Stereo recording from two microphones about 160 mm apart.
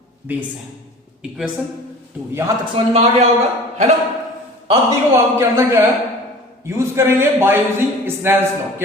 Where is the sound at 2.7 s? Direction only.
40° right (ahead or behind).